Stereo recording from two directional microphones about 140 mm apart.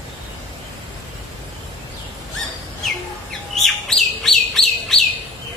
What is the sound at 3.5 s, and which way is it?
Bird, centre (ahead or behind).